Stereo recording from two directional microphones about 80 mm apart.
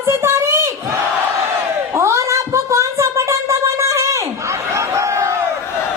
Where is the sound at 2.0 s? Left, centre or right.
Right.